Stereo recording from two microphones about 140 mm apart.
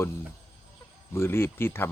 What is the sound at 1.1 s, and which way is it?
Speech, 20° left (ahead or behind).